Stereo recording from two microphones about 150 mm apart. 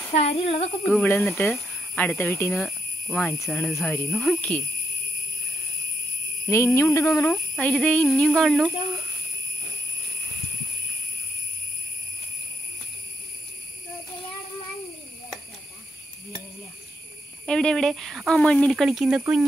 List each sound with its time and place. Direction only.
0.1 s speech: 45° left (ahead or behind)
1.0 s speech: 15° left (ahead or behind)
6.5 s speech: 15° left (ahead or behind)
7.5 s speech: 5° left (ahead or behind)
17.5 s speech: 5° left (ahead or behind)